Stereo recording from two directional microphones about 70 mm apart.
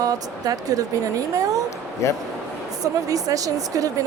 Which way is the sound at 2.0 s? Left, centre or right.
Left.